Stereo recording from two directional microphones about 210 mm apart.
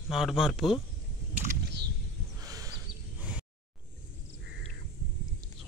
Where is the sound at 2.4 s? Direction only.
15° right (ahead or behind).